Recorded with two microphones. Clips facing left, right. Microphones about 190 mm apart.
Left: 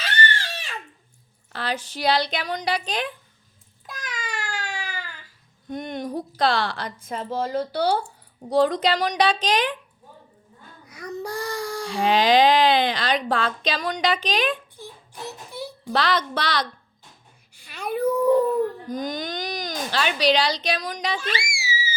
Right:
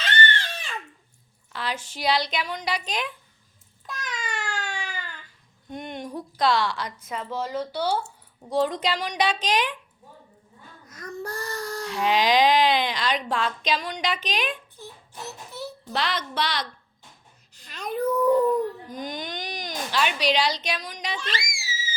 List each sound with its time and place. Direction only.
0.0 s a sound: 10° left (ahead or behind)
1.5 s speech: 35° left (ahead or behind)
3.8 s a sound: 5° left (ahead or behind)
5.7 s speech: 40° left (ahead or behind)
6.7 s a woman's voice: 55° left (ahead or behind)
7.8 s speech: 65° left (ahead or behind)
8.7 s speech: 35° left (ahead or behind)
10.8 s baby cry: 10° left (ahead or behind)
11.9 s speech: 30° left (ahead or behind)
14.8 s a sound: 10° left (ahead or behind)
16.0 s speech: 35° left (ahead or behind)
17.5 s dog: 10° left (ahead or behind)
18.9 s speech: 40° left (ahead or behind)
21.2 s screaming: 10° left (ahead or behind)